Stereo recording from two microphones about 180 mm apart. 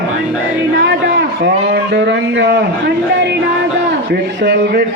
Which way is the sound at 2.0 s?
70° right (ahead or behind).